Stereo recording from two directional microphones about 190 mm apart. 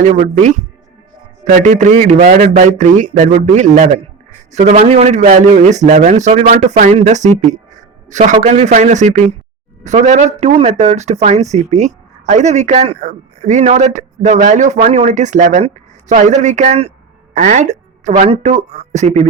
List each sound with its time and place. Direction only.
0.0 s speech: 40° right (ahead or behind)